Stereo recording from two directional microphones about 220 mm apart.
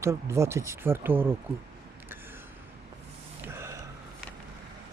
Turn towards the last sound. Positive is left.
turn(degrees=-10)  # may be behind; listen again after turning